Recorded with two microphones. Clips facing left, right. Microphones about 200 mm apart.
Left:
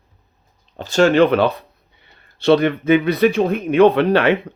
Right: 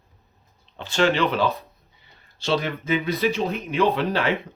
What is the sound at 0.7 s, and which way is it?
A man's voice, 40° left (ahead or behind).